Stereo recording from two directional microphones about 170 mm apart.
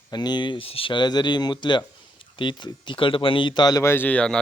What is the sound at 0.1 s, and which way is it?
A man's voice, 25° left (ahead or behind).